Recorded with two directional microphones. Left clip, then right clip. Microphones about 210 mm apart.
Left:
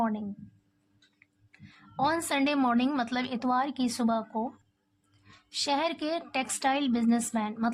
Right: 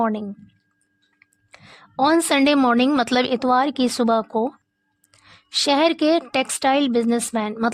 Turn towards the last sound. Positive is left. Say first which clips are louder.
# right 8 dB
turn(degrees=-50)  # may be behind; listen again after turning